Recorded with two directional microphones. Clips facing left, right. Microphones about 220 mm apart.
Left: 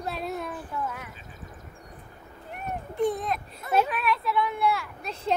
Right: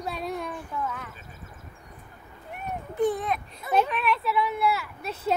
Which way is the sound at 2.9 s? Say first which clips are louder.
Right 1 dB; centre (ahead or behind).